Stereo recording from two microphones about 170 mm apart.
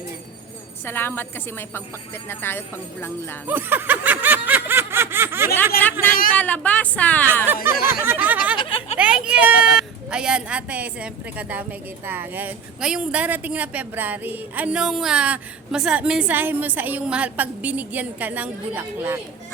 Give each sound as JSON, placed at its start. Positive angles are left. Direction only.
{"t": 0.9, "sound": "speech", "side_deg": 10}
{"t": 3.4, "sound": "snicker", "side_deg": -10}
{"t": 5.7, "sound": "speech", "side_deg": 55}
{"t": 6.3, "sound": "speech", "side_deg": 10}
{"t": 7.4, "sound": "speech", "side_deg": -10}
{"t": 8.5, "sound": "a sound", "side_deg": 30}
{"t": 9.0, "sound": "a woman's voice", "side_deg": -5}